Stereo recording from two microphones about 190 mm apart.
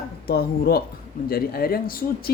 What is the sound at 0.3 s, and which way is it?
Speech, 55° left (ahead or behind).